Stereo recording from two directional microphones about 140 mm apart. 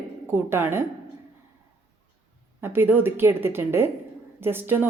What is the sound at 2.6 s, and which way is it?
Speech, 15° right (ahead or behind).